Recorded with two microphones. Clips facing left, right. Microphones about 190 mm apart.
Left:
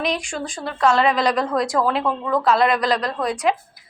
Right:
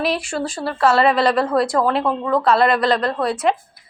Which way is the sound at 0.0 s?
5° right (ahead or behind).